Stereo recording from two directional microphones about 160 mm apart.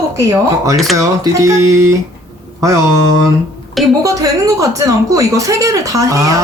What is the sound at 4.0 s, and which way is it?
Speech, 20° right (ahead or behind).